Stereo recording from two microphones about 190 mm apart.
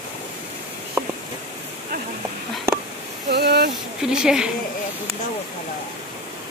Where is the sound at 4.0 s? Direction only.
5° right (ahead or behind).